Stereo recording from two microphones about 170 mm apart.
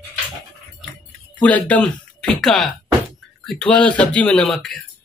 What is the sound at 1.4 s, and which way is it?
Speech, 10° left (ahead or behind).